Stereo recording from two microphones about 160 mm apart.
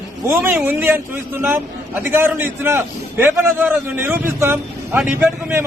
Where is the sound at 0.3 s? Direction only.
5° right (ahead or behind).